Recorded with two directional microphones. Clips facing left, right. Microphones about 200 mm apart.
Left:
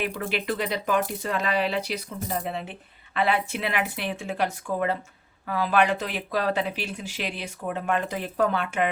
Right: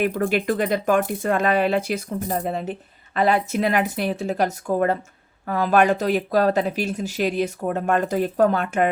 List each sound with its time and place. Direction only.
0.0 s speech: 50° right (ahead or behind)